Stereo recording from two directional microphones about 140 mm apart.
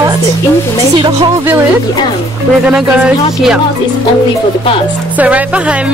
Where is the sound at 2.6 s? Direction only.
5° right (ahead or behind).